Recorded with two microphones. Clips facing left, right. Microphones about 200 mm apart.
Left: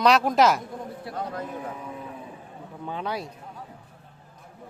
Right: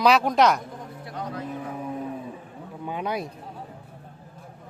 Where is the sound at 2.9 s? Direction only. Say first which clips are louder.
Right 2 dB; 15° right (ahead or behind).